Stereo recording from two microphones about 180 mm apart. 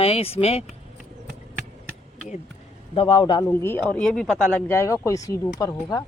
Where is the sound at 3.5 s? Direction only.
10° left (ahead or behind).